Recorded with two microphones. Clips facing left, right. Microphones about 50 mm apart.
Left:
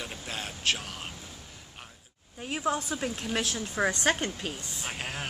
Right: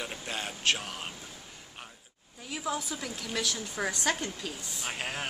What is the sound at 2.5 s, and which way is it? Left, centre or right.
A woman's voice, left.